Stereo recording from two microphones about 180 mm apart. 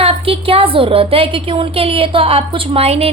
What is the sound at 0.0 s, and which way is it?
A woman's voice, 30° right (ahead or behind).